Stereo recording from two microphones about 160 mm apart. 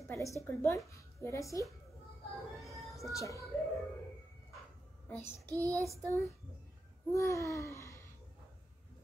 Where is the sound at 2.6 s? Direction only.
Centre (ahead or behind).